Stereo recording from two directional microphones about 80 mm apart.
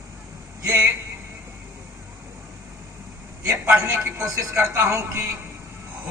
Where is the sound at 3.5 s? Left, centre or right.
Right.